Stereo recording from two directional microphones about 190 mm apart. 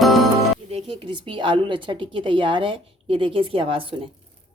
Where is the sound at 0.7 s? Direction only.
25° right (ahead or behind).